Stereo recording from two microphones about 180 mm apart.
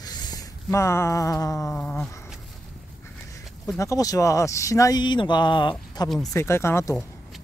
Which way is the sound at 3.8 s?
20° left (ahead or behind).